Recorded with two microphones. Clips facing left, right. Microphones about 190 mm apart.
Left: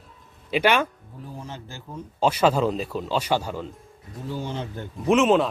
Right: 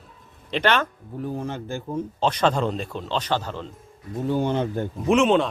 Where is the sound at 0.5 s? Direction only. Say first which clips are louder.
Left 1 dB; 10° left (ahead or behind).